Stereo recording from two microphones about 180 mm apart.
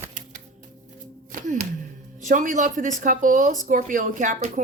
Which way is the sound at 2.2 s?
45° right (ahead or behind).